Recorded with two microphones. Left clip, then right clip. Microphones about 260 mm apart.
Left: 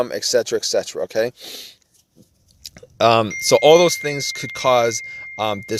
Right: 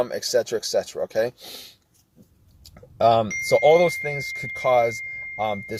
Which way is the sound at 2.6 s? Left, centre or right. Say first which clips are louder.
Left 3 dB; left.